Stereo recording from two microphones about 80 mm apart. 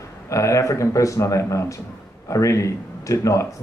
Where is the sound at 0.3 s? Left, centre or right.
Left.